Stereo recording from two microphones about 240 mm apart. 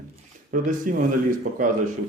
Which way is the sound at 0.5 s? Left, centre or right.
Right.